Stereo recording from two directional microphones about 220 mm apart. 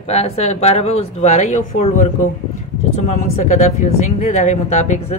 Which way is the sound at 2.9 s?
30° left (ahead or behind).